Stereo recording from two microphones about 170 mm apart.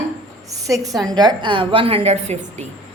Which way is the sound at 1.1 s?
25° right (ahead or behind).